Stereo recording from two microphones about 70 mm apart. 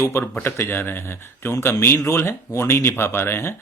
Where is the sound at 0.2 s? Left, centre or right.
Left.